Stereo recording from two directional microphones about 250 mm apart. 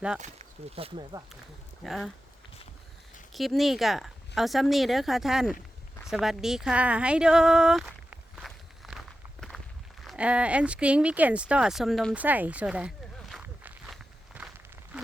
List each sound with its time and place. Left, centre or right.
0.8 s speech: right
1.8 s speech: centre
3.3 s a woman's voice: centre
10.0 s speech: centre
13.3 s walk: centre